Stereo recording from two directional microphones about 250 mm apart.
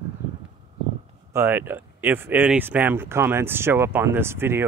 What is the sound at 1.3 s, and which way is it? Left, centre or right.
Speech, centre.